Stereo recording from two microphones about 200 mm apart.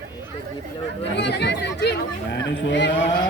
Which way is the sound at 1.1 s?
60° left (ahead or behind).